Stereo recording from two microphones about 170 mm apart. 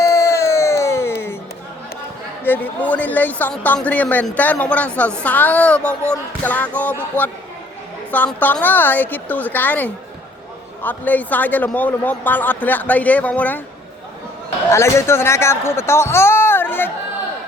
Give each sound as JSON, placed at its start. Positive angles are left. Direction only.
{"t": 0.0, "sound": "music", "side_deg": 20}
{"t": 2.4, "sound": "speech", "side_deg": 10}
{"t": 14.7, "sound": "speech", "side_deg": 15}